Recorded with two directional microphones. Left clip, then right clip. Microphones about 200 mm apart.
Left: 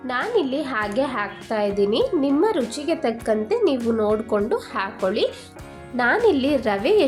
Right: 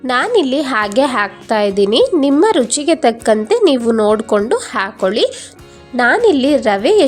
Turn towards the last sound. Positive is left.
turn(degrees=-35)  # may be behind; listen again after turning